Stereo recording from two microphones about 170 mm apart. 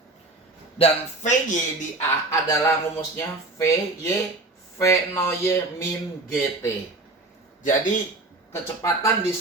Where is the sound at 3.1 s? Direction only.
15° left (ahead or behind).